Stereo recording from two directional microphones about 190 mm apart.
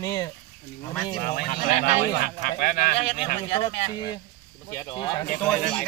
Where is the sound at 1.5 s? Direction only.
35° left (ahead or behind).